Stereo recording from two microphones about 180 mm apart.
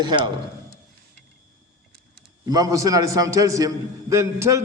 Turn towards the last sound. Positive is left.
turn(degrees=-15)  # may be behind; listen again after turning